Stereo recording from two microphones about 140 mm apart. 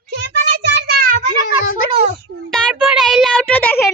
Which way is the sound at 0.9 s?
90° right.